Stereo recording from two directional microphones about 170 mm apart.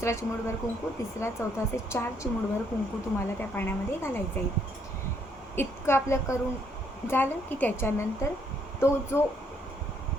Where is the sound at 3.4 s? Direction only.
10° left (ahead or behind).